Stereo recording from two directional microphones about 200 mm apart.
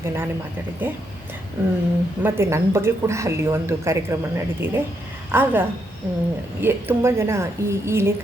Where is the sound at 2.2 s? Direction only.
10° right (ahead or behind).